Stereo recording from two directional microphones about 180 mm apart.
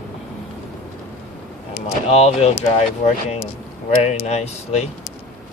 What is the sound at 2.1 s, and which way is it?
Speech, 35° left (ahead or behind).